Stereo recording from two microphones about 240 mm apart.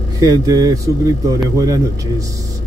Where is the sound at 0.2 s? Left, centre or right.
Centre.